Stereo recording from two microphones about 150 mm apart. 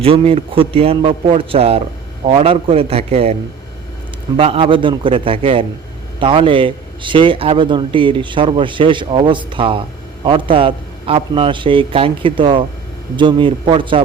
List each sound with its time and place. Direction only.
0.0 s a man's voice: 40° right (ahead or behind)
4.4 s a man's voice: 40° right (ahead or behind)